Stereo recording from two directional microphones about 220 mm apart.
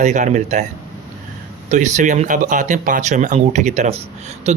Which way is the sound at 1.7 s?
35° right (ahead or behind).